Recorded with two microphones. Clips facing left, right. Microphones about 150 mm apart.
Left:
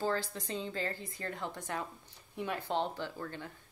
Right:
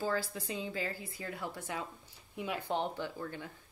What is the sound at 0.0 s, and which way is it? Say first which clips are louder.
A woman's voice: left 1 dB; 10° right (ahead or behind).